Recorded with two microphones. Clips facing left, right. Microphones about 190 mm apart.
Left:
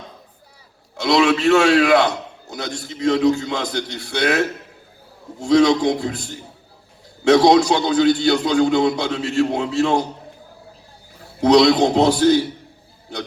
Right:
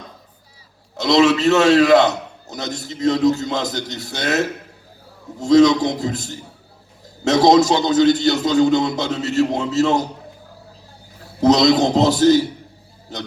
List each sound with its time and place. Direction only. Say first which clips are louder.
1.0 s a man's voice: right 1 dB; 40° right (ahead or behind)
7.3 s a man's voice: even; 40° right (ahead or behind)
11.4 s a man's voice: left 1 dB; 40° right (ahead or behind)